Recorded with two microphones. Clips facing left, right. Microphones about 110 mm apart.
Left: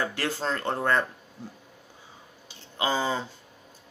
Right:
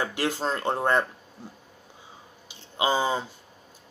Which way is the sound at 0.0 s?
15° right (ahead or behind).